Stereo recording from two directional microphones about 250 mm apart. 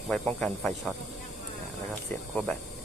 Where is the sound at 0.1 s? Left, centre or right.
Centre.